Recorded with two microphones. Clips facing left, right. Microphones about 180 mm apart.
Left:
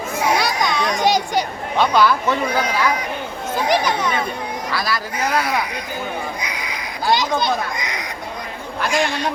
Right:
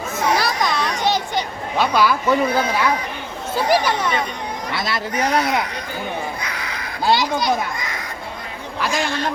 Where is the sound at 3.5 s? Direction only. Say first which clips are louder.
Right 1 dB; 10° right (ahead or behind).